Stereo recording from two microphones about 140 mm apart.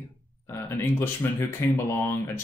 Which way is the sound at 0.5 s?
15° left (ahead or behind).